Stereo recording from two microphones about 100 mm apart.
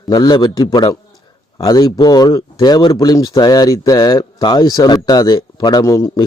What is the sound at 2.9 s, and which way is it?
Speech, 40° left (ahead or behind).